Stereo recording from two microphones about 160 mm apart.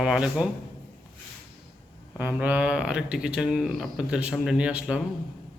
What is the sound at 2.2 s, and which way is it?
Speech, 10° right (ahead or behind).